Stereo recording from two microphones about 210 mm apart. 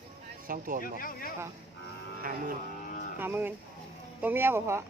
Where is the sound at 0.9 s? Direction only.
40° left (ahead or behind).